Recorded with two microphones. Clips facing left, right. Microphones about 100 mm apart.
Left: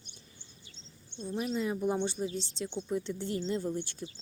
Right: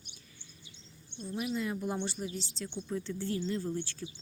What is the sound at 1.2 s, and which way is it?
A woman's voice, 30° left (ahead or behind).